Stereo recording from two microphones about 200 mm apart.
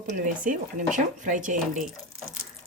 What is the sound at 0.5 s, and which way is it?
Speech, 40° right (ahead or behind).